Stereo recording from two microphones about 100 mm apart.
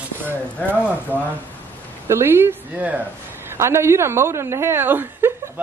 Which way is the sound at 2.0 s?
25° right (ahead or behind).